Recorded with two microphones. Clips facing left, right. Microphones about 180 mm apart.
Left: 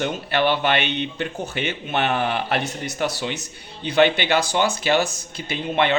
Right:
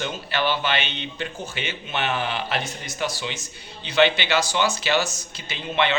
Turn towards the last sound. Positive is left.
turn(degrees=50)  # may be behind; listen again after turning